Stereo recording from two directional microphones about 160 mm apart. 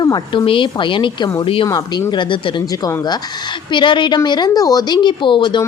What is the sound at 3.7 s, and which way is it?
Speech, 30° left (ahead or behind).